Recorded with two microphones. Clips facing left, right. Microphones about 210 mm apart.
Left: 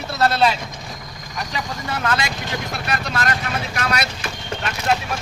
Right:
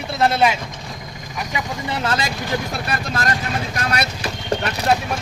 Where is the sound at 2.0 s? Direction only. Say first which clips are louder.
Even; 30° right (ahead or behind).